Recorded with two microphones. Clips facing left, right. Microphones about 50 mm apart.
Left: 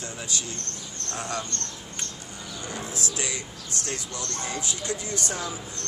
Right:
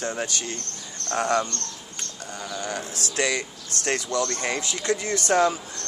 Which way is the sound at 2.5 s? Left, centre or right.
Right.